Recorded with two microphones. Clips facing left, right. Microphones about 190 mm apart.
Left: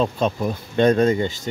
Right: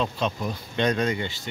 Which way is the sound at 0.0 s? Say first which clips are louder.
Left 6 dB; 45° left (ahead or behind).